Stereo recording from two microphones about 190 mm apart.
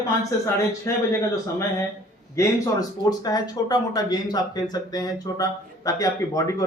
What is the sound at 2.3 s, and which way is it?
Speech, 15° left (ahead or behind).